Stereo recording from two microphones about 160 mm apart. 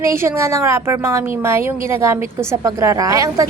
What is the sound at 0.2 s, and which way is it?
A woman's voice, 20° right (ahead or behind).